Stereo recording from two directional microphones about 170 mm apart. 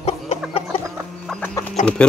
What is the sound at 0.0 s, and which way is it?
Chicken, 40° left (ahead or behind).